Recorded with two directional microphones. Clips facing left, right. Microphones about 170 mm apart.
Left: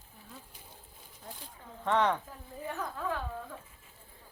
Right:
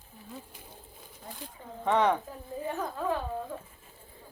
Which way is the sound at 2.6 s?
25° right (ahead or behind).